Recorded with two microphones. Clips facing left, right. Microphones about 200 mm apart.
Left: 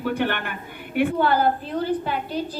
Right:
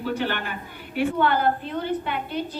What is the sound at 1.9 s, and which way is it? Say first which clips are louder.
Speech: left 2 dB; 35° left (ahead or behind).